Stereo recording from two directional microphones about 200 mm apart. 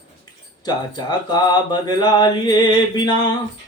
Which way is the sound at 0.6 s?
20° left (ahead or behind).